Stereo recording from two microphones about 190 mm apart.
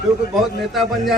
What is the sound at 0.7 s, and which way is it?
Speech, centre (ahead or behind).